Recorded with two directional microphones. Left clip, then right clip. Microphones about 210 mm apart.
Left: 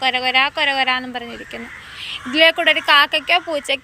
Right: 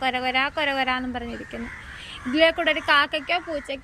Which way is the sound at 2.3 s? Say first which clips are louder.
Left 6 dB; 10° right (ahead or behind).